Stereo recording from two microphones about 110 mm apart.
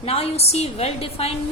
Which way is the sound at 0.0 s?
65° left (ahead or behind).